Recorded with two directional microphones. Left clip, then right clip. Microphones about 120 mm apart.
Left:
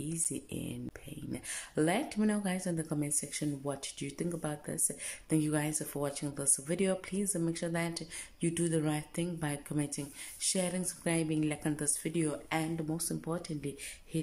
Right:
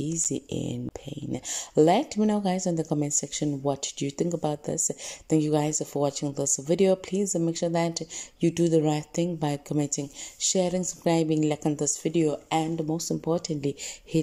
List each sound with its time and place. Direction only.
0.0 s speech: 35° right (ahead or behind)
11.7 s speech: 30° right (ahead or behind)
13.2 s speech: 40° right (ahead or behind)